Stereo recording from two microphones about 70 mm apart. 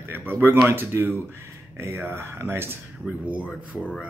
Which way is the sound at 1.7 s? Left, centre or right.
Right.